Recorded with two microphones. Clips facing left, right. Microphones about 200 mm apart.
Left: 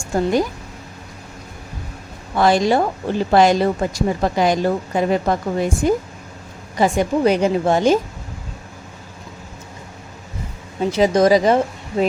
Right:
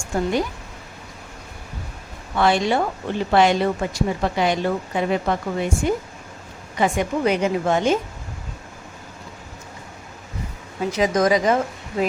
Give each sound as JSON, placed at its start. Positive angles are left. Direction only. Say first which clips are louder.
{"t": 2.3, "sound": "speech", "louder": "left 4 dB", "side_deg": 40}
{"t": 10.8, "sound": "speech", "louder": "left 4 dB", "side_deg": 30}